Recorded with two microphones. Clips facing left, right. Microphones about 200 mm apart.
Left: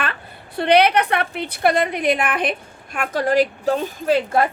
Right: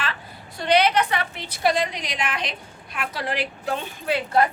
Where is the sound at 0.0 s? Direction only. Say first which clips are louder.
Left 4 dB; 60° left (ahead or behind); by 4.4 s 45° left (ahead or behind).